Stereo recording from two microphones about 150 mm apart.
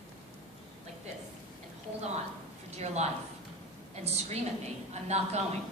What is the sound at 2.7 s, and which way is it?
Speech, 50° right (ahead or behind).